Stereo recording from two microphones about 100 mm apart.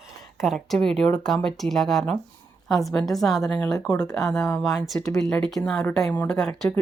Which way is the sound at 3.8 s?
10° left (ahead or behind).